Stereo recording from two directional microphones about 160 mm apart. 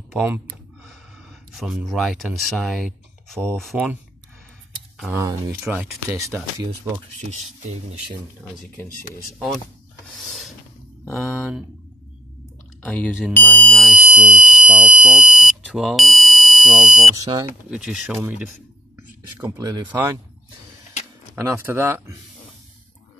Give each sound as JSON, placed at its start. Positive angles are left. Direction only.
{"t": 0.1, "sound": "speech", "side_deg": -10}
{"t": 1.5, "sound": "speech", "side_deg": 0}
{"t": 3.7, "sound": "speech", "side_deg": -10}
{"t": 5.1, "sound": "speech", "side_deg": -15}
{"t": 12.8, "sound": "speech", "side_deg": 10}
{"t": 13.3, "sound": "alarm", "side_deg": 10}
{"t": 17.1, "sound": "speech", "side_deg": -25}
{"t": 17.6, "sound": "speech", "side_deg": -5}
{"t": 21.4, "sound": "speech", "side_deg": -15}